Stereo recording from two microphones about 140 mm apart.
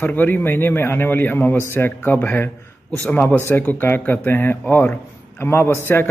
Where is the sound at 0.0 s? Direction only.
15° left (ahead or behind).